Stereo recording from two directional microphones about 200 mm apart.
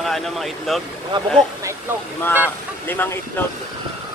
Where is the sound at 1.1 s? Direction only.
25° right (ahead or behind).